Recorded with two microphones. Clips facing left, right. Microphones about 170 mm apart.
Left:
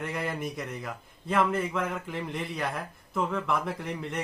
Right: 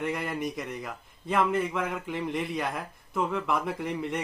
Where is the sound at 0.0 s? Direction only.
Centre (ahead or behind).